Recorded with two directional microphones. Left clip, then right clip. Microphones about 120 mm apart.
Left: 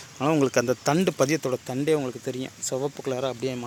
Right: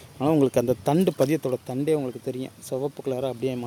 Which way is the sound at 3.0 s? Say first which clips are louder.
Even; 15° right (ahead or behind).